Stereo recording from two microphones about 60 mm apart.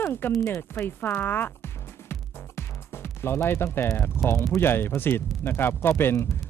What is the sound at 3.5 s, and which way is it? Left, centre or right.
Speech, left.